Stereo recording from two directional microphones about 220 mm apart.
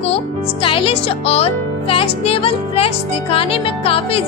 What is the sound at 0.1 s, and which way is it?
Speech, 25° left (ahead or behind).